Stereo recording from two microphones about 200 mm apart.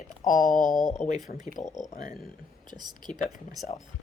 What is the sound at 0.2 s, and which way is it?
Speech, 40° left (ahead or behind).